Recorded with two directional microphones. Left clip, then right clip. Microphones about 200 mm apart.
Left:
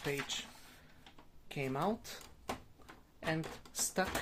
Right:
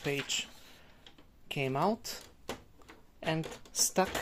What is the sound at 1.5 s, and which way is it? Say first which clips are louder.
Speech: right 6 dB; 45° right (ahead or behind).